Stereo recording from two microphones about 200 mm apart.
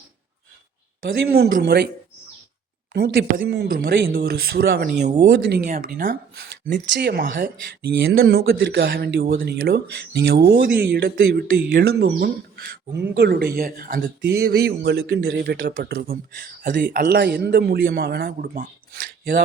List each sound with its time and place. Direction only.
1.3 s speech: 45° right (ahead or behind)
2.9 s speech: 50° right (ahead or behind)
6.9 s speech: 55° right (ahead or behind)